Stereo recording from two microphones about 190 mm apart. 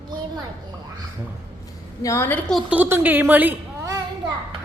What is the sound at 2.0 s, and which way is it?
Speech, 15° left (ahead or behind).